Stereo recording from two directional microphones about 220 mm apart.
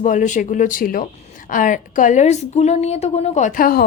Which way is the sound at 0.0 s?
35° left (ahead or behind).